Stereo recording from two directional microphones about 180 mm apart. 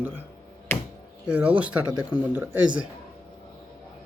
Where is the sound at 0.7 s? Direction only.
10° left (ahead or behind).